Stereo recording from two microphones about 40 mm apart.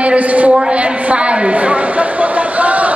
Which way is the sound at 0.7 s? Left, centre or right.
Right.